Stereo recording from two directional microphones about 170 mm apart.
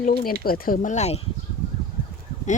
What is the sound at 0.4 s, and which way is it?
Speech, 60° left (ahead or behind).